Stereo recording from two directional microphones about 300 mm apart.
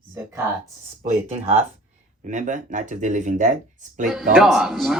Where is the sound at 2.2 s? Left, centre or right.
Right.